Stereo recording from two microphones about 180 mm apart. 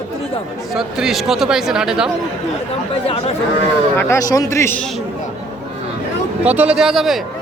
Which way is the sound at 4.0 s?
15° left (ahead or behind).